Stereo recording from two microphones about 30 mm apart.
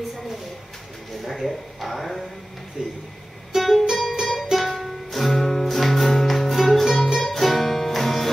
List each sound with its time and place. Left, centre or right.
1.2 s speech: centre
2.8 s speech: centre
3.5 s music: centre
5.1 s music: centre
5.4 s music: centre
5.7 s music: centre
6.5 s music: centre